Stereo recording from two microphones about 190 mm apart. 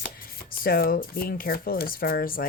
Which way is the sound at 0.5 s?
50° left (ahead or behind).